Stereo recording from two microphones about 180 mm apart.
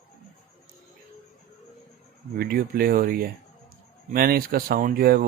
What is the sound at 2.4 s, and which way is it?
Speech, 55° right (ahead or behind).